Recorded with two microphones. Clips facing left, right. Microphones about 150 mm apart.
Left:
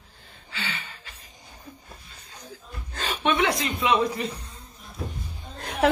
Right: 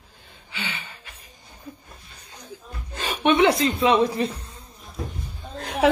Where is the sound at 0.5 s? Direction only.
20° right (ahead or behind).